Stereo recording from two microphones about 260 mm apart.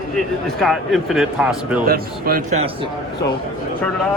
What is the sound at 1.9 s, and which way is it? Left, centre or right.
Speech, right.